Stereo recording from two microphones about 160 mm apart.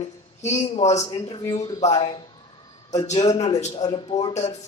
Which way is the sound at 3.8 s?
30° left (ahead or behind).